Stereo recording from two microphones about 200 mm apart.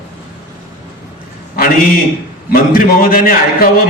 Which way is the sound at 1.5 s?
45° left (ahead or behind).